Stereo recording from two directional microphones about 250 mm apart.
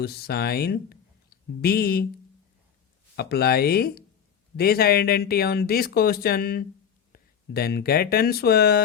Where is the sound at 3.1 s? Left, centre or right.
Left.